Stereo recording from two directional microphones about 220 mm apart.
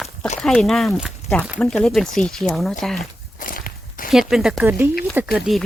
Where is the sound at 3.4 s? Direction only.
40° left (ahead or behind).